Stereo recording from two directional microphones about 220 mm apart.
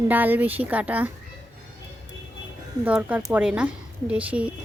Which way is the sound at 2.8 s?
5° right (ahead or behind).